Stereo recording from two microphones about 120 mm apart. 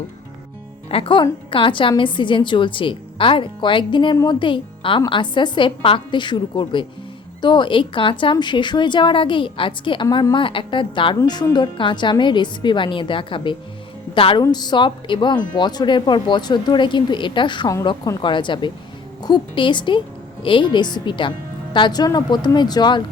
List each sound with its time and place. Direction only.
0.9 s a woman's voice: 50° left (ahead or behind)
14.4 s speech: 35° left (ahead or behind)